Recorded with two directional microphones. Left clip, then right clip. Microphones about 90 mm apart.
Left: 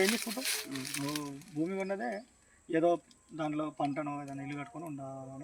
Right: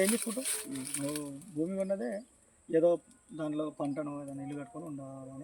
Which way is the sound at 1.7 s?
20° right (ahead or behind).